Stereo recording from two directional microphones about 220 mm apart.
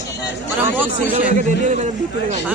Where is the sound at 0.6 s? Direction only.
10° right (ahead or behind).